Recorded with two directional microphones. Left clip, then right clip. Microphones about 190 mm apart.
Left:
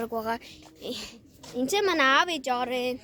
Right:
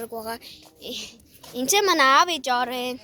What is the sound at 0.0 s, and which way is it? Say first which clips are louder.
Speech: left 2 dB; 50° left (ahead or behind).